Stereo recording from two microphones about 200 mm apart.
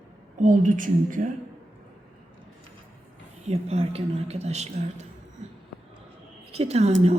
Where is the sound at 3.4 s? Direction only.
30° right (ahead or behind).